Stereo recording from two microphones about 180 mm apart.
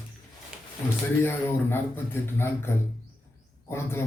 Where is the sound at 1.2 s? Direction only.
10° left (ahead or behind).